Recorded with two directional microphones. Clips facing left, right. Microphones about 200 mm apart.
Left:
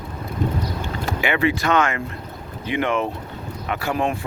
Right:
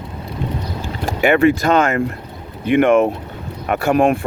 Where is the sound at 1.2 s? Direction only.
45° right (ahead or behind).